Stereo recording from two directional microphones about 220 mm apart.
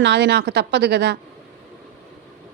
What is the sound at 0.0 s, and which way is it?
A woman's voice, 50° right (ahead or behind).